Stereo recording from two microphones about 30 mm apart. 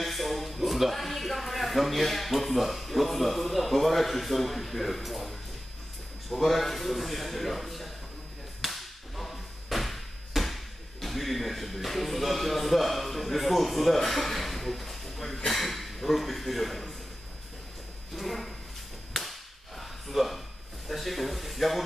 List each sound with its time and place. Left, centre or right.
0.0 s a man's voice: centre
8.6 s whip: centre
18.1 s a man's voice: centre
19.8 s a sound: centre
20.9 s a man's voice: centre